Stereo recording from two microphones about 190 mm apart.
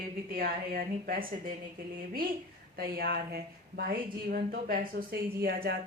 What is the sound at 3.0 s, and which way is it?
A woman's voice, 55° right (ahead or behind).